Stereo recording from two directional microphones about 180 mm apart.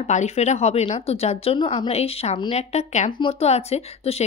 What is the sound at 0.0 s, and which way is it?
Speech, 40° left (ahead or behind).